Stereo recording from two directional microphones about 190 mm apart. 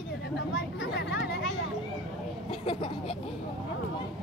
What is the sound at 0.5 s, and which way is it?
Speech, 65° left (ahead or behind).